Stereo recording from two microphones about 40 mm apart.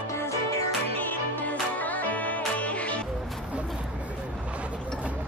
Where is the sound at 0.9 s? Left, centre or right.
Left.